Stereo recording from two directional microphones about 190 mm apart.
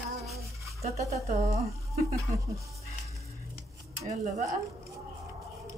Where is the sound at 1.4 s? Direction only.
15° right (ahead or behind).